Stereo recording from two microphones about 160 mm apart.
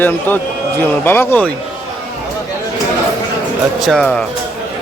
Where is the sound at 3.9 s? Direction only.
5° left (ahead or behind).